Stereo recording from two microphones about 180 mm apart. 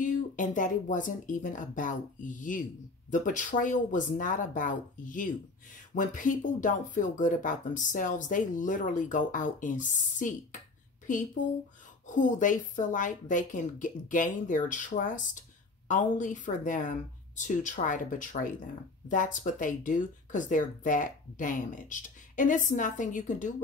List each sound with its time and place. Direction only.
0.0 s speech: 45° left (ahead or behind)